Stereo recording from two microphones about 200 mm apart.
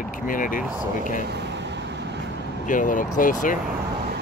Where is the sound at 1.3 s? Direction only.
55° right (ahead or behind).